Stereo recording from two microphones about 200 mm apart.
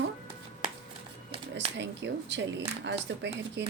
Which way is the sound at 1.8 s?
60° right (ahead or behind).